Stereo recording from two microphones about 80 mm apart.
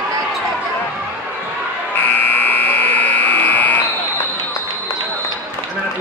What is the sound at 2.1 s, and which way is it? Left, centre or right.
Buzzer, left.